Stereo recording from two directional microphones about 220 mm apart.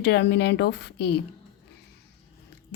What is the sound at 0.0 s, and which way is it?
A woman's voice, 50° left (ahead or behind).